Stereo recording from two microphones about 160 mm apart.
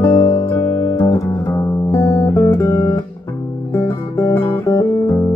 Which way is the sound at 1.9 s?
20° left (ahead or behind).